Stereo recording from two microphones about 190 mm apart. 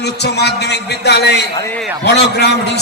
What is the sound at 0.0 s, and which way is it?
A man's voice, 60° left (ahead or behind).